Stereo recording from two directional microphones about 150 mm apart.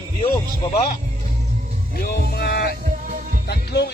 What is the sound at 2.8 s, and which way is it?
Music, 60° right (ahead or behind).